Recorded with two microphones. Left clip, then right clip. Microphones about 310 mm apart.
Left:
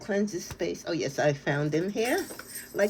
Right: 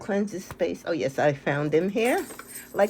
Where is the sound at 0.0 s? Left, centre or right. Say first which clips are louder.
Right 1 dB; centre.